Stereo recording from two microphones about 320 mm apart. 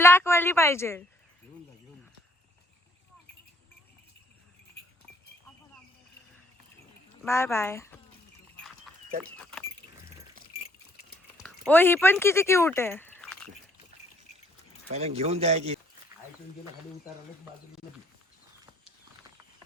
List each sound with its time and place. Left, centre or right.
0.0 s speech: centre
7.2 s speech: centre
9.4 s keys jangling: centre
11.3 s speech: centre
14.9 s speech: centre